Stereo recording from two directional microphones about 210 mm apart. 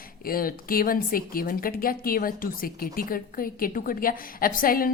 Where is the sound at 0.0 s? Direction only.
45° left (ahead or behind).